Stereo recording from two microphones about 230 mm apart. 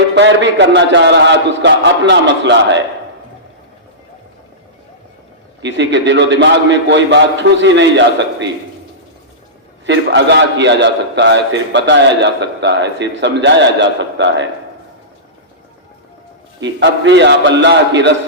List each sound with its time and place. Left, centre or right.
0.2 s a man's voice: right
5.6 s a man's voice: right
9.8 s a man's voice: right
16.6 s a man's voice: right